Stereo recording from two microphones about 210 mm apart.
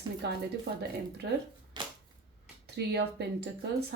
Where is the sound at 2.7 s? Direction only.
50° right (ahead or behind).